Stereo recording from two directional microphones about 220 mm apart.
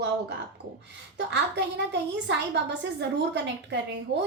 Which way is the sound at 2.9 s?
50° right (ahead or behind).